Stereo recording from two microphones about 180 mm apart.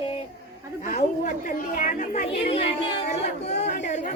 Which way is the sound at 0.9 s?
40° left (ahead or behind).